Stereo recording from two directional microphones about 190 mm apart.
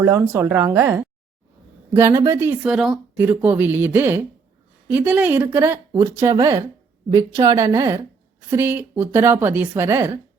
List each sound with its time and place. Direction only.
0.0 s speech: 15° right (ahead or behind)